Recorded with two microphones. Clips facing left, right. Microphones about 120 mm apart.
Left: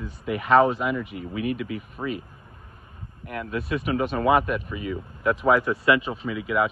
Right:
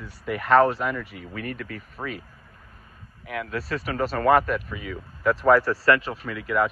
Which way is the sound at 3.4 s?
15° left (ahead or behind).